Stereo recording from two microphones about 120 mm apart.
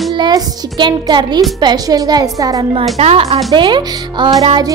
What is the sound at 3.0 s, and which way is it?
Speech, 60° right (ahead or behind).